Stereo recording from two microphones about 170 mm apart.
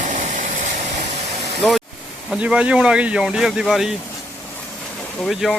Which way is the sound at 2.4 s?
5° right (ahead or behind).